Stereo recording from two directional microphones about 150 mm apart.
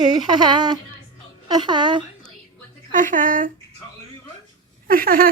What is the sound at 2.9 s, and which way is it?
Speech, 60° right (ahead or behind).